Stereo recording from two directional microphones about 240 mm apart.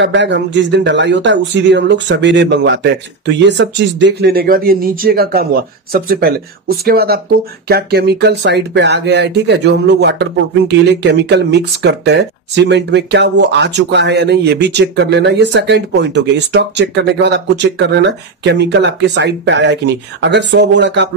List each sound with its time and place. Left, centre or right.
0.0 s speech: right